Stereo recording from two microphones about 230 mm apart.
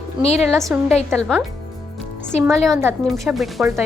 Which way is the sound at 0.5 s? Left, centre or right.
Centre.